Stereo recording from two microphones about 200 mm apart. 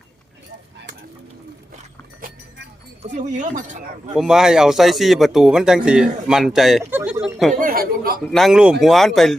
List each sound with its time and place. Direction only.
3.0 s speech: 40° right (ahead or behind)
4.1 s a man's voice: 5° right (ahead or behind)
7.6 s chuckle: 45° right (ahead or behind)
8.3 s a man's voice: centre (ahead or behind)